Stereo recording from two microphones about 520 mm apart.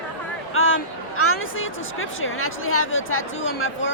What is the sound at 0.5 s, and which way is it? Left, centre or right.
Speech, left.